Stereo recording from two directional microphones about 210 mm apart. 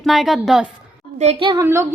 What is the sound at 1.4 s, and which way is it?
Speech, 20° right (ahead or behind).